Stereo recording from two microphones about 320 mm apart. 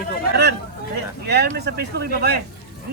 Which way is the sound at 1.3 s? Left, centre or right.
Right.